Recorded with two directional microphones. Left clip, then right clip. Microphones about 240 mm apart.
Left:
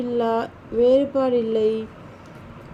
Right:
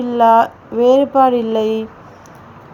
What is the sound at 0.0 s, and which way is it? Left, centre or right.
Speech, right.